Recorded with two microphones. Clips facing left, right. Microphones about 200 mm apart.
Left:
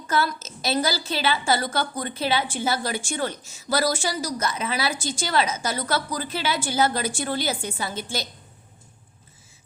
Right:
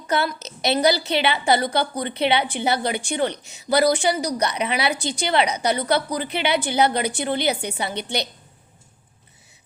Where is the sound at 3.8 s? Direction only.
60° right (ahead or behind).